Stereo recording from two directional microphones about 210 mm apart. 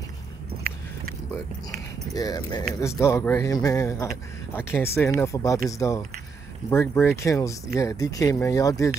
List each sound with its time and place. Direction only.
2.1 s speech: 20° left (ahead or behind)